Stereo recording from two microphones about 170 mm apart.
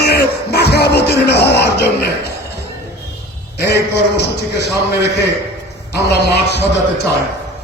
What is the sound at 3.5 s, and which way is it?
A man's voice, 75° left (ahead or behind).